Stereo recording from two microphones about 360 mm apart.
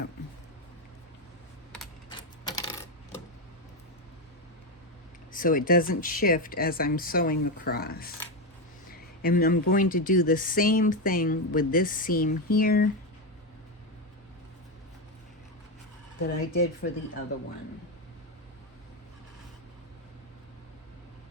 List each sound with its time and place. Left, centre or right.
2.0 s typewriter: centre
5.3 s speech: left
16.2 s speech: left